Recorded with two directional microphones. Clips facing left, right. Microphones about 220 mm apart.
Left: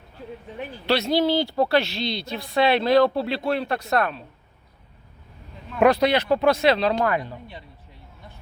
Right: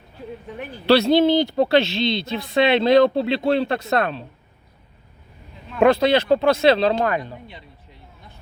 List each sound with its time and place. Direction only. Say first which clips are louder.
0.9 s speech: right 6 dB; 30° right (ahead or behind)
5.8 s speech: right 2 dB; 25° right (ahead or behind)